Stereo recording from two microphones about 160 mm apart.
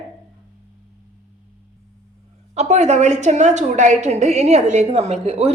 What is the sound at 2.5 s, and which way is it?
A woman's voice, 45° right (ahead or behind).